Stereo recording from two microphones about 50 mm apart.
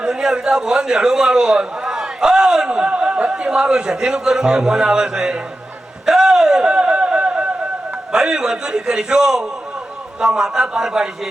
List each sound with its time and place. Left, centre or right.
0.0 s a man's voice: centre
6.1 s a sound: centre
8.1 s a man's voice: centre